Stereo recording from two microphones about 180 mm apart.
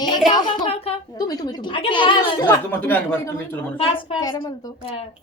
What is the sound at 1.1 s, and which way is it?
Speech, 20° left (ahead or behind).